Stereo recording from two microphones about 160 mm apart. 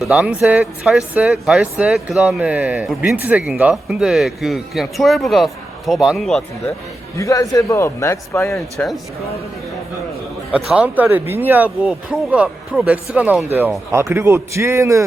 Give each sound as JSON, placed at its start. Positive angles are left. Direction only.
{"t": 0.0, "sound": "speech", "side_deg": -5}
{"t": 7.2, "sound": "a man's voice", "side_deg": 20}
{"t": 10.5, "sound": "speech", "side_deg": -10}